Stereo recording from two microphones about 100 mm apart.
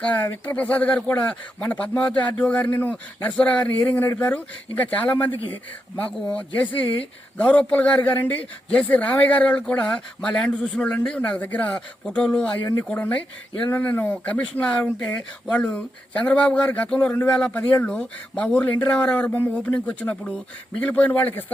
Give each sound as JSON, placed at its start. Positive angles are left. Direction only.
{"t": 0.0, "sound": "speech", "side_deg": 15}